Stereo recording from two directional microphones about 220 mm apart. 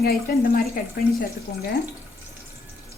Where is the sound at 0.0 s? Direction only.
45° left (ahead or behind).